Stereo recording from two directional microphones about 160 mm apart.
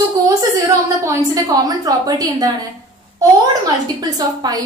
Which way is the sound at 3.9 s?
25° right (ahead or behind).